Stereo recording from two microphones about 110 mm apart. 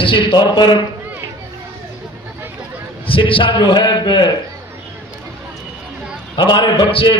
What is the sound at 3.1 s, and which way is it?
A man's voice, 50° left (ahead or behind).